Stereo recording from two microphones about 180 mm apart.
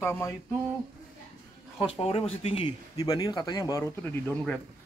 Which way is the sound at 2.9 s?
20° left (ahead or behind).